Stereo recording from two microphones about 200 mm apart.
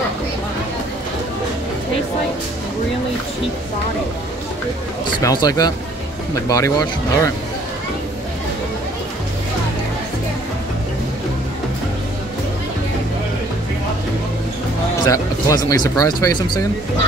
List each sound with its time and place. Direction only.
5.2 s speech: 20° left (ahead or behind)
15.0 s speech: 15° left (ahead or behind)